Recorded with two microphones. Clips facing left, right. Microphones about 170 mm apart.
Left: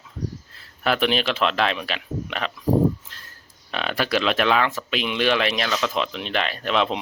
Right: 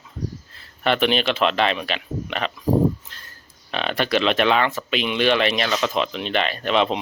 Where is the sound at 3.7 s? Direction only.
Centre (ahead or behind).